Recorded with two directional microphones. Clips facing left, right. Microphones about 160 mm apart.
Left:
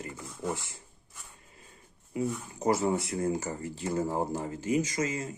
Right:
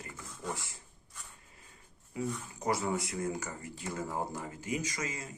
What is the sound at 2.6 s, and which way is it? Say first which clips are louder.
Speech: left 6 dB; 25° left (ahead or behind).